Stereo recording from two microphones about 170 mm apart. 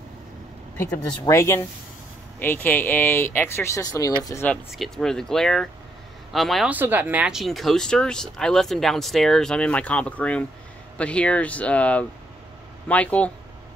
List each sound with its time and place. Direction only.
1.0 s speech: 20° left (ahead or behind)
4.5 s speech: centre (ahead or behind)
6.7 s speech: 10° right (ahead or behind); by 13.3 s 10° left (ahead or behind)